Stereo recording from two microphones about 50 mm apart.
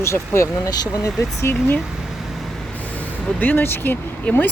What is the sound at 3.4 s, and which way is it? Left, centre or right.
Speech, left.